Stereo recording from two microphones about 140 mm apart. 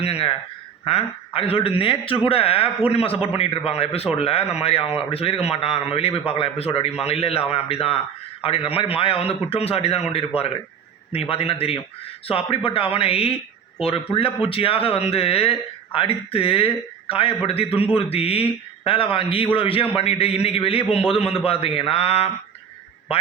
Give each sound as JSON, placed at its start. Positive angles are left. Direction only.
{"t": 0.0, "sound": "a man's voice", "side_deg": 45}